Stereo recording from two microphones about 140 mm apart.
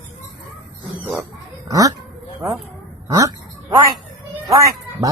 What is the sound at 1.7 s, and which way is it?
Speech, 25° right (ahead or behind).